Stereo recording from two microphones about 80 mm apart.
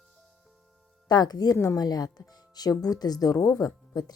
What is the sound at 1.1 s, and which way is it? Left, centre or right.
Speech, left.